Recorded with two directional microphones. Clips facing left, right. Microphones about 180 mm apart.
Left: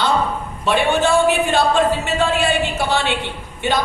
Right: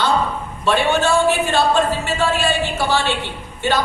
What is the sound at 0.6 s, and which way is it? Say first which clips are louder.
A man's voice: even; 15° left (ahead or behind).